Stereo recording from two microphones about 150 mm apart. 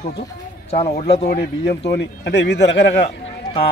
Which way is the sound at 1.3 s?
90° left.